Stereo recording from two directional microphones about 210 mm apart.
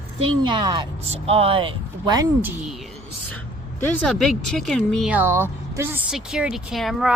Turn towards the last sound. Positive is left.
turn(degrees=0)  # may be behind; listen again after turning